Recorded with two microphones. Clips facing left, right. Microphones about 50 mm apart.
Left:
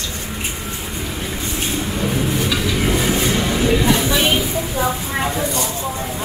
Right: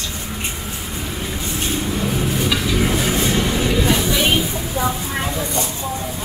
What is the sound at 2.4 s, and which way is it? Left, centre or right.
Vehicle, centre.